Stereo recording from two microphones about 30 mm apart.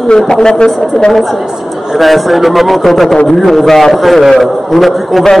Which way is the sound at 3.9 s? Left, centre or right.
Centre.